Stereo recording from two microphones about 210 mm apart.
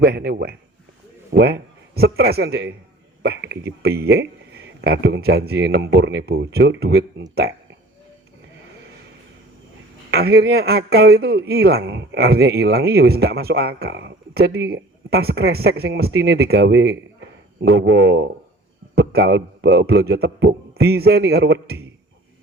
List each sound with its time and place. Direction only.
0.0 s a man's voice: 50° right (ahead or behind)
10.1 s speech: 50° right (ahead or behind)